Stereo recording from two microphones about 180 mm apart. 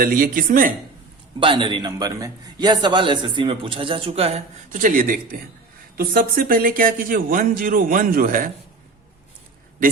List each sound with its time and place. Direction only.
0.0 s speech: 55° right (ahead or behind)
1.4 s a man's voice: 30° right (ahead or behind); by 8.4 s 55° right (ahead or behind)